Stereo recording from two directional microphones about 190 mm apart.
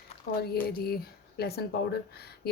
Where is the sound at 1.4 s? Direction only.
55° left (ahead or behind).